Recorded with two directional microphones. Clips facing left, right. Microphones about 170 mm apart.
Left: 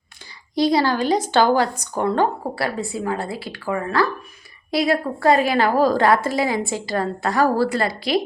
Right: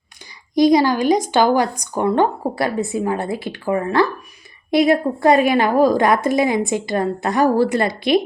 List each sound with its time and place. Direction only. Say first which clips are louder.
0.5 s a woman's voice: right 5 dB; 15° right (ahead or behind)